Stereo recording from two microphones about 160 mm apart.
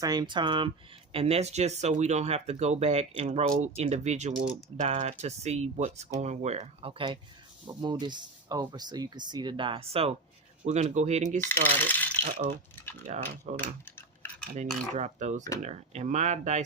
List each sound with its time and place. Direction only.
0.0 s speech: 25° right (ahead or behind)
1.1 s speech: 40° right (ahead or behind)
11.9 s rattle: 10° left (ahead or behind)
12.7 s typing: 15° left (ahead or behind)
13.1 s speech: 45° right (ahead or behind)
14.4 s cutlery: 50° right (ahead or behind)
14.9 s speech: 45° right (ahead or behind)